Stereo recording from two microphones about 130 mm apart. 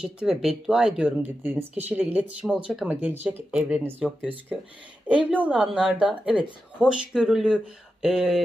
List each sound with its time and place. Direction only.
0.0 s speech: 5° right (ahead or behind)